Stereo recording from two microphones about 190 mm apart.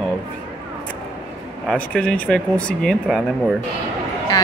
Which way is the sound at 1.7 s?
5° left (ahead or behind).